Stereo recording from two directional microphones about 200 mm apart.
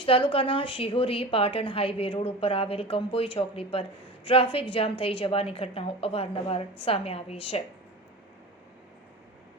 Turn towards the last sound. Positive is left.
turn(degrees=30)  # may be behind; listen again after turning